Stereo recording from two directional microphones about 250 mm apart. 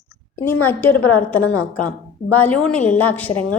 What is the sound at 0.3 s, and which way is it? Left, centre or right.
A woman's voice, centre.